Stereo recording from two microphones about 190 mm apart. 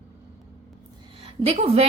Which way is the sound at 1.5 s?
35° right (ahead or behind).